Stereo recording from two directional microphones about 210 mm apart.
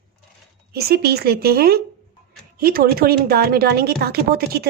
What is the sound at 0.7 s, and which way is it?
A woman's voice, 50° right (ahead or behind).